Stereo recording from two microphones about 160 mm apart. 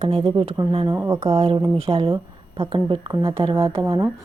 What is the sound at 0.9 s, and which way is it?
Speech, 20° right (ahead or behind).